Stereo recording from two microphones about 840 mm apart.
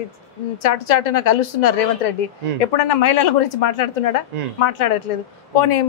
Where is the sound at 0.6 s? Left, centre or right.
Left.